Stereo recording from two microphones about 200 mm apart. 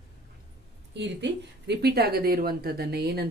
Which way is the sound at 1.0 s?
60° right (ahead or behind).